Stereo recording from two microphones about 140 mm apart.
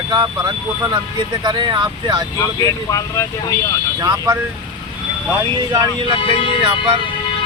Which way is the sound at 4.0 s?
25° right (ahead or behind).